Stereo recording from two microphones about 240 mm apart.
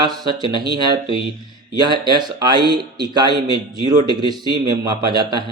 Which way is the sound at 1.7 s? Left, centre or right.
Centre.